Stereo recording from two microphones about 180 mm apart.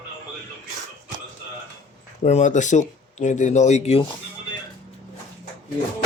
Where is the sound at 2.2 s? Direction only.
40° left (ahead or behind).